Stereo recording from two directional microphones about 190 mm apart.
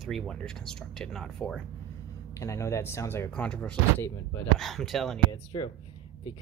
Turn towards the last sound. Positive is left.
turn(degrees=20)  # may be behind; listen again after turning